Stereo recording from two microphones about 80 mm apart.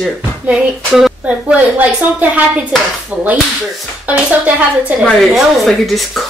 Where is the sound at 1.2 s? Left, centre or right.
Centre.